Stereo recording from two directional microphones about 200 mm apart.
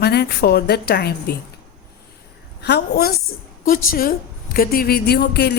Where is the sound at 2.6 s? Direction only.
55° left (ahead or behind).